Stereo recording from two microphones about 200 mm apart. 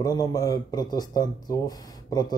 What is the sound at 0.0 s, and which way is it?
Speech, 20° left (ahead or behind).